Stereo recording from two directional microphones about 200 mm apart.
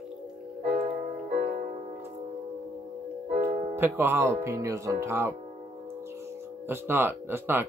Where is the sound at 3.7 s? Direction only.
10° right (ahead or behind).